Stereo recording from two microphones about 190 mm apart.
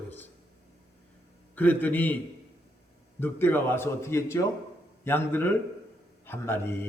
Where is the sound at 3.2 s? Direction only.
10° left (ahead or behind).